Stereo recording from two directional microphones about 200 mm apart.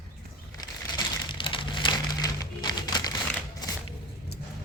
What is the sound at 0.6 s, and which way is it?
Crumpling, 20° left (ahead or behind).